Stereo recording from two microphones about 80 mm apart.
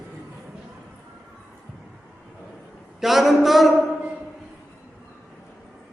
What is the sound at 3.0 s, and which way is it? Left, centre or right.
Speech, centre.